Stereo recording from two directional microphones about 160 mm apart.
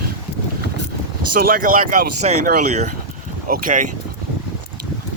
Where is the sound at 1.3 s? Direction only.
65° right (ahead or behind); by 3.0 s 45° right (ahead or behind).